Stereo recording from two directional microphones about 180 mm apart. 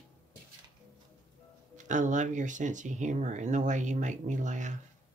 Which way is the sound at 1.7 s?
45° right (ahead or behind).